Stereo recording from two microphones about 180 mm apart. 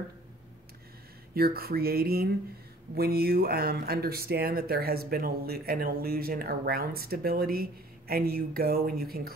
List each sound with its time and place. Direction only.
1.3 s speech: 60° right (ahead or behind)